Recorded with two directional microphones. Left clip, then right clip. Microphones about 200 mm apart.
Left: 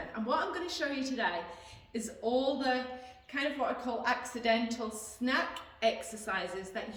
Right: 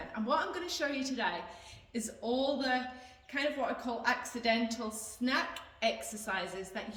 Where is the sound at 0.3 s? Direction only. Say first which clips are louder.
Even; 20° right (ahead or behind).